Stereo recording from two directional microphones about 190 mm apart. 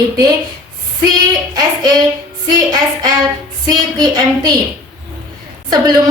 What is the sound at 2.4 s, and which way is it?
A woman's voice, 20° right (ahead or behind).